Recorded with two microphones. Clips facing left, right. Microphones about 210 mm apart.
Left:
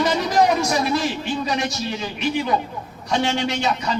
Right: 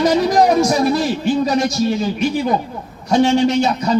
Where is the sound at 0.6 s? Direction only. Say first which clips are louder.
Right 6 dB; 40° right (ahead or behind).